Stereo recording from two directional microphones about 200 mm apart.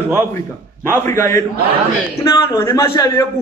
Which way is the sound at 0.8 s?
10° left (ahead or behind).